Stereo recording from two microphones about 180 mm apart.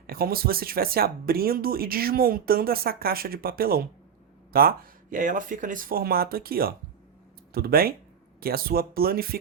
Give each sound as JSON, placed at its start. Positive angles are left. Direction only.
{"t": 0.1, "sound": "speech", "side_deg": -55}